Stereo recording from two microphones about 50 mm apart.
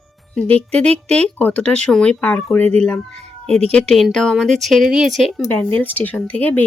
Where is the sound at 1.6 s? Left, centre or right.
Left.